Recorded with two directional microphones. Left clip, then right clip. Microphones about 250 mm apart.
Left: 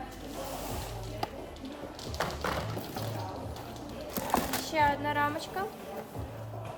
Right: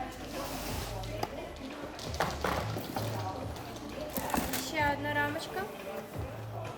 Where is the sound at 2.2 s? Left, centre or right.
Centre.